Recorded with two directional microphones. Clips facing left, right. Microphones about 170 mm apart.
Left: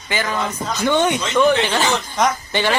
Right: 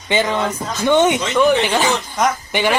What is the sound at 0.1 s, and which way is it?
Speech, 25° right (ahead or behind).